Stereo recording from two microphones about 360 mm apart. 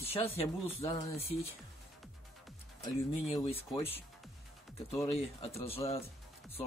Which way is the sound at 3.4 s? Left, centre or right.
Centre.